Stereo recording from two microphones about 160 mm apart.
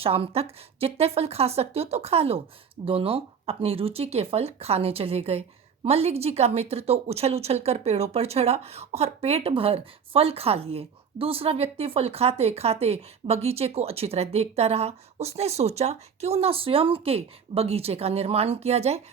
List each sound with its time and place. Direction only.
0.0 s speech: 35° right (ahead or behind)